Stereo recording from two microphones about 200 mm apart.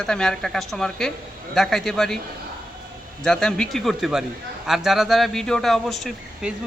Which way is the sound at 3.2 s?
5° left (ahead or behind).